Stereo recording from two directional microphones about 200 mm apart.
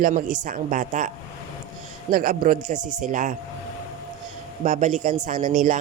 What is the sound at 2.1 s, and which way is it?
Speech, 45° right (ahead or behind).